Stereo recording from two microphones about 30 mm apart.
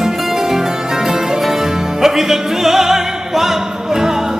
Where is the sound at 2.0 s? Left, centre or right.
Centre.